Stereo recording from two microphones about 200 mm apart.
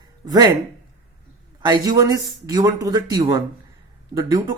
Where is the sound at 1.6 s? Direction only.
20° right (ahead or behind).